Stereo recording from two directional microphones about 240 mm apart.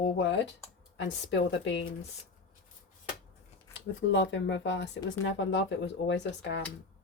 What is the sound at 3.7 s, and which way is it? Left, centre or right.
Speech, left.